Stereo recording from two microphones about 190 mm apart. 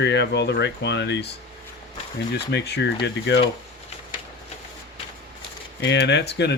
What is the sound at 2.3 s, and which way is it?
Speech, 60° left (ahead or behind).